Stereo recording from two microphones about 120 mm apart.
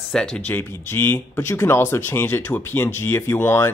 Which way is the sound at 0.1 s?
5° left (ahead or behind).